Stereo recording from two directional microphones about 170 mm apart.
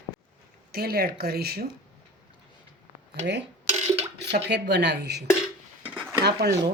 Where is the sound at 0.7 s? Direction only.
65° right (ahead or behind).